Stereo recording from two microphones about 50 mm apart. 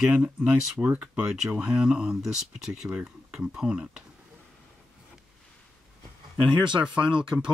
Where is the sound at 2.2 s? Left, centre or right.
Centre.